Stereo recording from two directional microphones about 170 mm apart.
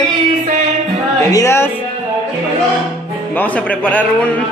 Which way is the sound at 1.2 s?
20° left (ahead or behind).